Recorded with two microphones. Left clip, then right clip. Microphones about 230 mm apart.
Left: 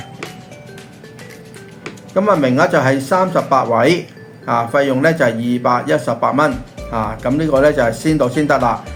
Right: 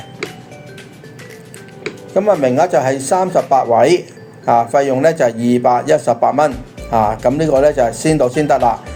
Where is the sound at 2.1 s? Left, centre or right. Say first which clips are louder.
Right 1 dB; right.